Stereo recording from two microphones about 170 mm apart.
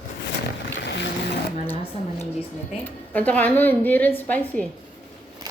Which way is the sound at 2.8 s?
10° left (ahead or behind).